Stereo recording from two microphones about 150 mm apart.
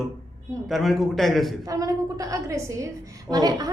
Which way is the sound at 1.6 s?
20° right (ahead or behind).